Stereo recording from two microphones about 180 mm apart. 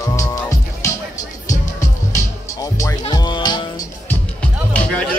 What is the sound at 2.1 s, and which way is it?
Music, 20° left (ahead or behind).